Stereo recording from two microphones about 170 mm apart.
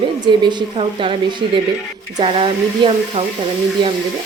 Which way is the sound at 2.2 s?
35° right (ahead or behind).